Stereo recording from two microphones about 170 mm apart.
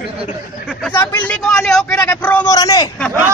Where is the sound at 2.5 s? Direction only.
20° left (ahead or behind).